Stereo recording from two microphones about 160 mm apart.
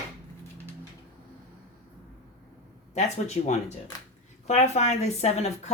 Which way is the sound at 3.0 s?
45° left (ahead or behind).